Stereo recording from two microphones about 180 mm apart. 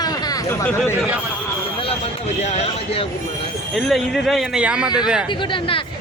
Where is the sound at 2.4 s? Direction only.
35° left (ahead or behind).